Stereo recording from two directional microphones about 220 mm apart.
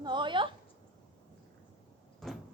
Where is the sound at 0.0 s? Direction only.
20° right (ahead or behind).